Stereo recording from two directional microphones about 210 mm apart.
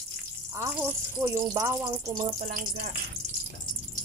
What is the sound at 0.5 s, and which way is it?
Speech, 15° right (ahead or behind).